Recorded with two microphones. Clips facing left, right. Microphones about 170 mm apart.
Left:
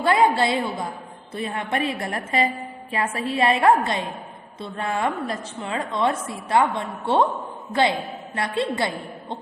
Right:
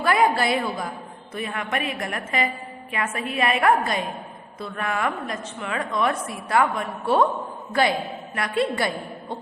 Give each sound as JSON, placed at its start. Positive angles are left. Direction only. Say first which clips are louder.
{"t": 0.0, "sound": "a woman's voice", "louder": "left 2 dB", "side_deg": 25}